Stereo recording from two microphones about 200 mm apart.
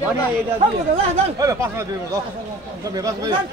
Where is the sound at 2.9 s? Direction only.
15° right (ahead or behind).